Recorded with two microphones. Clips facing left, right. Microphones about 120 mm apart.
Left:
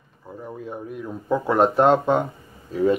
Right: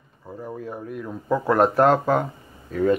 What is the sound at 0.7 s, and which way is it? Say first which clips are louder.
A man's voice: even; 5° left (ahead or behind).